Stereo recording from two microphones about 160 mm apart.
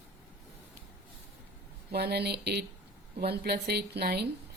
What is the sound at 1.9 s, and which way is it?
Speech, 90° right.